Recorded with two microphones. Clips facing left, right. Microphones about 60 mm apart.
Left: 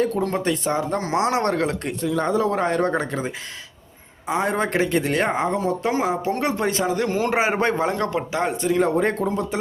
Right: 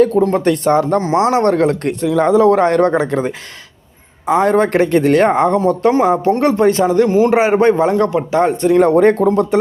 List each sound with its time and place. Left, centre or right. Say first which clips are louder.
0.2 s a man's voice: right 9 dB; right
0.4 s speech: right 9 dB; right
1.0 s a man's voice: right 8 dB; right
2.0 s a man's voice: right 9 dB; right
8.6 s speech: right 10 dB; right